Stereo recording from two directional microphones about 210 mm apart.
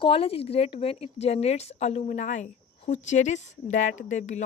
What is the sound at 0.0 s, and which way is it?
Speech, 25° left (ahead or behind).